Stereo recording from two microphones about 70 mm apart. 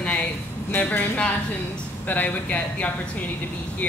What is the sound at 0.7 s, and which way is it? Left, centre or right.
Speech, left.